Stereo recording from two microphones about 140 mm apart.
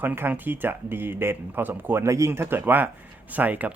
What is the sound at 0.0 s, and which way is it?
Speech, 15° right (ahead or behind).